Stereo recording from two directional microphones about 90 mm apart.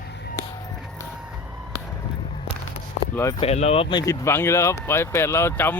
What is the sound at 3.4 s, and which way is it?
Speech, 90° left.